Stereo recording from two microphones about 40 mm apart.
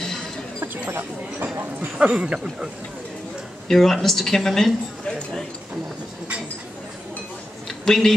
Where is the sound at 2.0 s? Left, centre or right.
Right.